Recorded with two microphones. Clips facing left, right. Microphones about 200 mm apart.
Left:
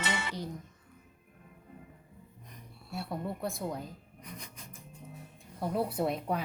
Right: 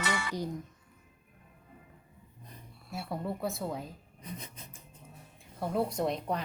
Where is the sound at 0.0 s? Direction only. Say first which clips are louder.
Right 1 dB; 25° left (ahead or behind).